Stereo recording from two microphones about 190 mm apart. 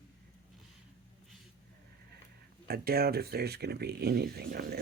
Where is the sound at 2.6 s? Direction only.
55° right (ahead or behind).